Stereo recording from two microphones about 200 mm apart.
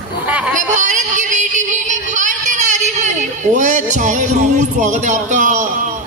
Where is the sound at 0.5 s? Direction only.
40° right (ahead or behind).